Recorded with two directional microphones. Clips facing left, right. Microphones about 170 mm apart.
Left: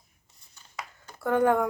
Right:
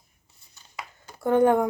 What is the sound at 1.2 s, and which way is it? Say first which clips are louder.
Speech: right 3 dB; 20° right (ahead or behind).